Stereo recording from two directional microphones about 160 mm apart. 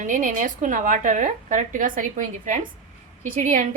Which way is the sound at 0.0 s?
55° right (ahead or behind).